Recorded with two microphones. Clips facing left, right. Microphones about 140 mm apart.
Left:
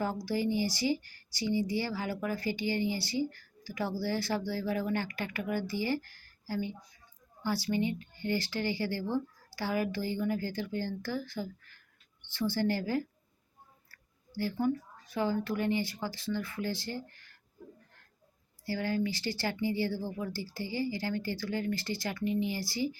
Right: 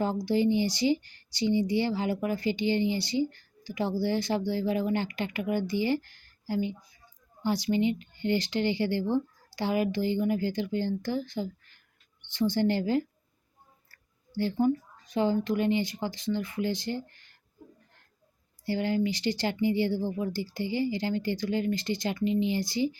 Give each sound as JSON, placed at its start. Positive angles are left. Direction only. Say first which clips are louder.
{"t": 0.0, "sound": "speech", "louder": "right 6 dB", "side_deg": -20}
{"t": 18.6, "sound": "speech", "louder": "right 4 dB", "side_deg": -20}